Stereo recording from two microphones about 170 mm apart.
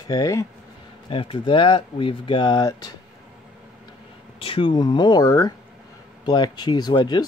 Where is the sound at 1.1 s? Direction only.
30° left (ahead or behind).